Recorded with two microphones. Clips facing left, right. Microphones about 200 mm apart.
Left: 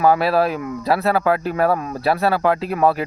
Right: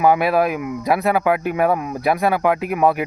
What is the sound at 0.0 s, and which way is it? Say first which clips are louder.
Speech: even; 15° right (ahead or behind).